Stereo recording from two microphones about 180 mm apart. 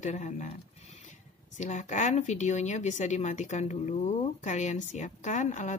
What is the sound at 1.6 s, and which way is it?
A woman's voice, 40° left (ahead or behind).